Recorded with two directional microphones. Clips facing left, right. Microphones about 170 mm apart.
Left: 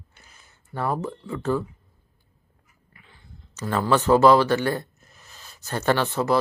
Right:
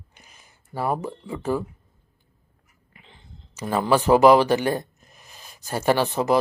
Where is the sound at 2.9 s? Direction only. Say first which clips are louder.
Right 3 dB; 20° right (ahead or behind).